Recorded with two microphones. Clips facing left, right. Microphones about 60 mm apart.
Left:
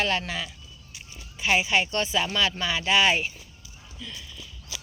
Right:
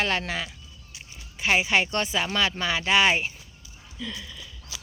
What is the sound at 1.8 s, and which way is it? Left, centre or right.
Speech, right.